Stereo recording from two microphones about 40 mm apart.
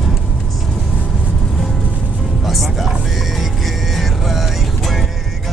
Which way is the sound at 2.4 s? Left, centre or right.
Centre.